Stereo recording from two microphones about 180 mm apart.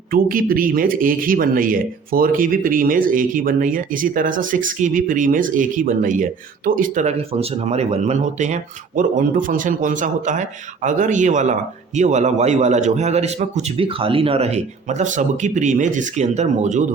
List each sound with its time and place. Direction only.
0.1 s a man's voice: 50° right (ahead or behind)